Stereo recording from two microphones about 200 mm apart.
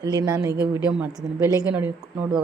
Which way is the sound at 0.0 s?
20° right (ahead or behind).